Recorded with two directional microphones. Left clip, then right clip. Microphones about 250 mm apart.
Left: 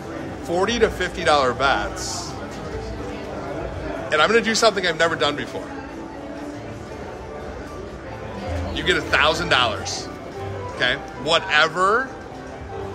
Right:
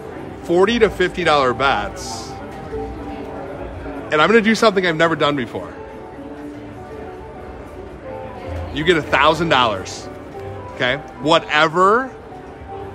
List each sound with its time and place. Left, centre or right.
0.5 s a man's voice: right
4.1 s a man's voice: right
8.7 s a man's voice: right